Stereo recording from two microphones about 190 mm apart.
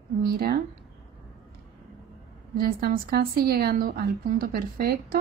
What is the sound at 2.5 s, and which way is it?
A woman's voice, 50° right (ahead or behind).